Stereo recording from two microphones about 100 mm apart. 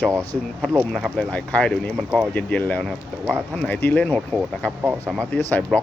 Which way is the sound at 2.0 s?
5° right (ahead or behind).